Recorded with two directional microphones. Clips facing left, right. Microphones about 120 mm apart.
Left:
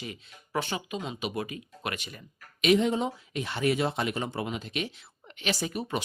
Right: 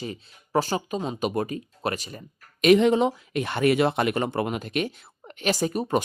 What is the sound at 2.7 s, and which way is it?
Speech, 70° right (ahead or behind).